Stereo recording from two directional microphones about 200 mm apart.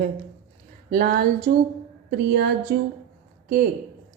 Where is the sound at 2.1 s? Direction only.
55° right (ahead or behind).